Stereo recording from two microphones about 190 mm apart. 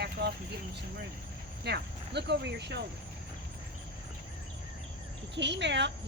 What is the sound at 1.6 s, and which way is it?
Speech, 60° right (ahead or behind).